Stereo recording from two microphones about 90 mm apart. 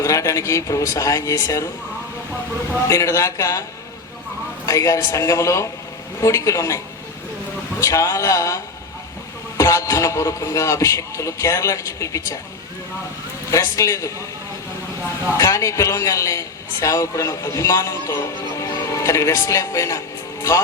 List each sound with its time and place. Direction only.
0.0 s a man's voice: 35° left (ahead or behind)
2.8 s a man's voice: 35° left (ahead or behind)
4.6 s a man's voice: 35° left (ahead or behind)
13.5 s a man's voice: 35° left (ahead or behind)
15.3 s a man's voice: 35° left (ahead or behind)